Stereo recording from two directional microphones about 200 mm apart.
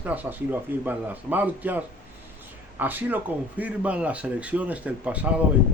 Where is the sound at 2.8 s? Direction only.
10° right (ahead or behind).